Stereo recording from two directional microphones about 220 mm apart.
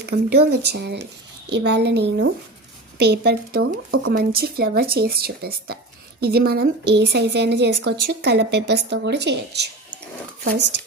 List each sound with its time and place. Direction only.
0.0 s a woman's voice: 50° right (ahead or behind)